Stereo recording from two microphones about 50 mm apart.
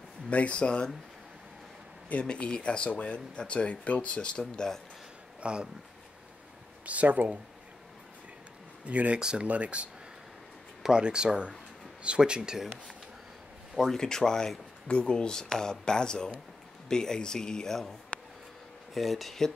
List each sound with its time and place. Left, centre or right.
0.3 s speech: left
2.2 s speech: centre
5.4 s speech: centre
6.9 s speech: right
8.8 s speech: right
13.9 s speech: centre
18.9 s speech: centre